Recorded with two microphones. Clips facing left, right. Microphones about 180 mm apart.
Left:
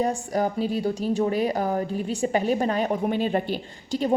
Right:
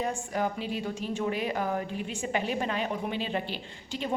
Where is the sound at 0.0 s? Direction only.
40° left (ahead or behind).